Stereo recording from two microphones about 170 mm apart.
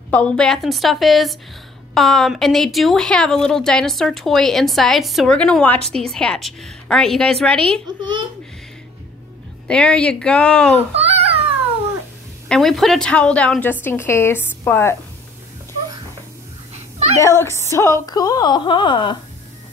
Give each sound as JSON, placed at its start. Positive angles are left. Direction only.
{"t": 0.1, "sound": "a woman's voice", "side_deg": 5}
{"t": 9.7, "sound": "a woman's voice", "side_deg": 5}
{"t": 10.9, "sound": "babbling", "side_deg": -35}
{"t": 12.4, "sound": "a woman's voice", "side_deg": 0}
{"t": 16.7, "sound": "a sound", "side_deg": -40}
{"t": 17.2, "sound": "a woman's voice", "side_deg": 15}